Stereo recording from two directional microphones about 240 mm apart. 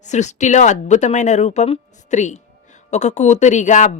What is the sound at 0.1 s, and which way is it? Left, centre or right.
A woman's voice, left.